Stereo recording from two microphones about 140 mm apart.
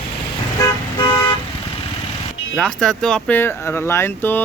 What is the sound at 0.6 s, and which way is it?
Toot, 30° left (ahead or behind).